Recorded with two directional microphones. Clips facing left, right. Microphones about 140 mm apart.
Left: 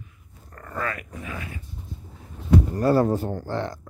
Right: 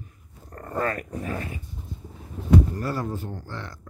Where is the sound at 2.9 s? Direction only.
65° left (ahead or behind).